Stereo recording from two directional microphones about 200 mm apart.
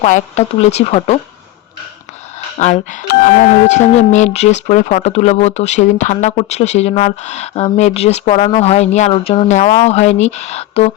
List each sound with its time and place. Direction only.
0.0 s speech: 35° left (ahead or behind)
2.6 s speech: 35° left (ahead or behind)